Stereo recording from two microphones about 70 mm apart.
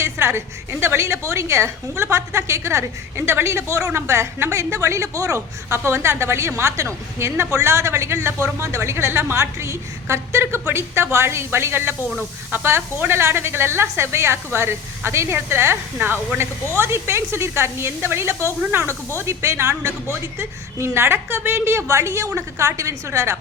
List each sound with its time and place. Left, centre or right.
0.0 s a woman's voice: right
5.6 s a woman's voice: right